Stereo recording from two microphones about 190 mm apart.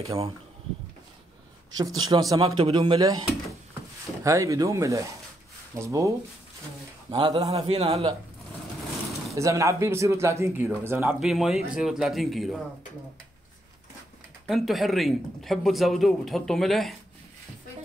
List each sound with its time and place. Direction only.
0.0 s a man's voice: 30° right (ahead or behind)
2.0 s speech: 20° right (ahead or behind)
7.1 s a man's voice: 25° right (ahead or behind)
9.3 s speech: 15° right (ahead or behind); by 12.6 s centre (ahead or behind)
14.4 s speech: centre (ahead or behind)